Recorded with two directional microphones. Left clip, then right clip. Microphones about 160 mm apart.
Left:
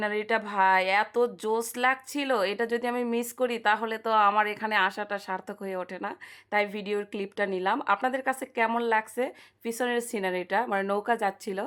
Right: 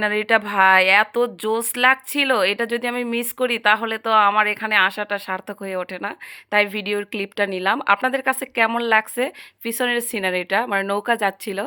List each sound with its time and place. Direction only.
0.0 s speech: 25° right (ahead or behind)